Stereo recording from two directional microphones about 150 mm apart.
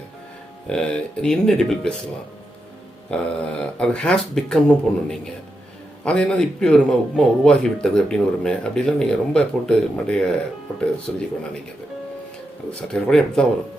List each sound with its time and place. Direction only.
0.7 s a man's voice: 5° left (ahead or behind)
3.1 s a man's voice: 5° left (ahead or behind)
6.1 s a man's voice: 5° left (ahead or behind)
12.9 s a man's voice: 5° left (ahead or behind)